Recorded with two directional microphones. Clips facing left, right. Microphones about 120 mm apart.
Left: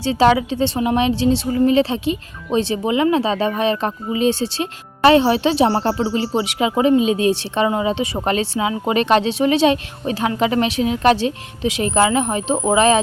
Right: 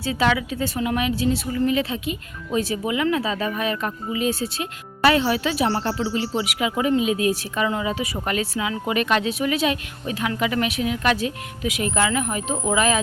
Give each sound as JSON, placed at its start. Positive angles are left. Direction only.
{"t": 0.0, "sound": "a woman's voice", "side_deg": 30}